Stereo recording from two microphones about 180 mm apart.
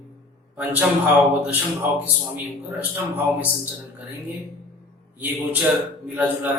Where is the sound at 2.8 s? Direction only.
10° right (ahead or behind).